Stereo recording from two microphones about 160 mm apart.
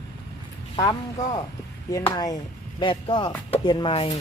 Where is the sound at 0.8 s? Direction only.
25° left (ahead or behind).